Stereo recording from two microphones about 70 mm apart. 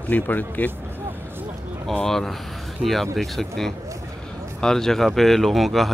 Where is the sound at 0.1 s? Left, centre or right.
Left.